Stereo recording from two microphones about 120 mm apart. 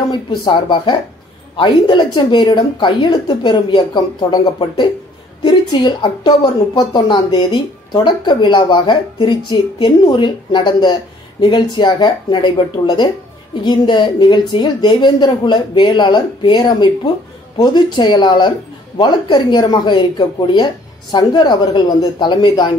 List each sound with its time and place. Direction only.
0.1 s speech: 40° left (ahead or behind)
5.4 s a woman's voice: 35° left (ahead or behind)